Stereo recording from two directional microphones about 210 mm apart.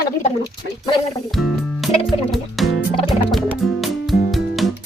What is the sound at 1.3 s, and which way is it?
Music, centre (ahead or behind).